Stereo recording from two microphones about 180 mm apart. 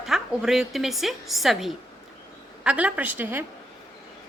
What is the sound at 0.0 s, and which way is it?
A woman's voice, centre (ahead or behind).